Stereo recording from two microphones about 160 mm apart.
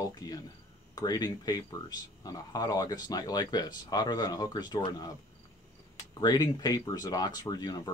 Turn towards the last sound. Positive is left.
turn(degrees=25)  # may be behind; listen again after turning